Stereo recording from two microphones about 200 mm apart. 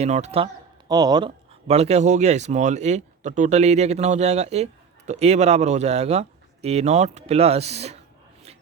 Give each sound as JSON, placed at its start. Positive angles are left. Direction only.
{"t": 0.0, "sound": "speech", "side_deg": -35}
{"t": 1.6, "sound": "speech", "side_deg": -30}